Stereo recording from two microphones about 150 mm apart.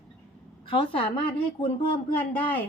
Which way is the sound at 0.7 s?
35° left (ahead or behind).